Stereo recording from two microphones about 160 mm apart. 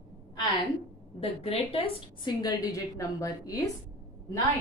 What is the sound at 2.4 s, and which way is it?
A woman's voice, 20° left (ahead or behind).